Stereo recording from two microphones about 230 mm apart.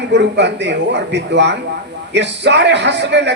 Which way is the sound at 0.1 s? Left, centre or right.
Right.